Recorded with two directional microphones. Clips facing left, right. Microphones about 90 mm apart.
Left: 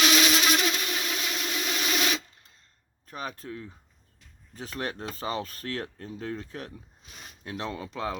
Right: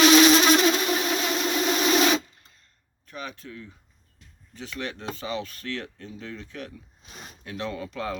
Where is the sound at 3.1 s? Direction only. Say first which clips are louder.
Left 1 dB; 40° left (ahead or behind).